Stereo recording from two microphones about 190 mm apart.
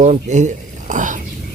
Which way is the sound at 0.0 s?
40° right (ahead or behind).